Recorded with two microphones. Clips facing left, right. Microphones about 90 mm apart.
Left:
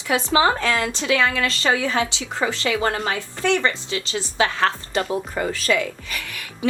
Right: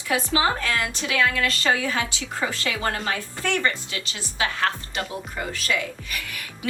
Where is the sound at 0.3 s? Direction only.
90° left.